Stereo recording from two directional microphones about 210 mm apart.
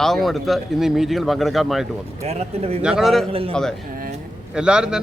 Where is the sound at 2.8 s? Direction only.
Centre (ahead or behind).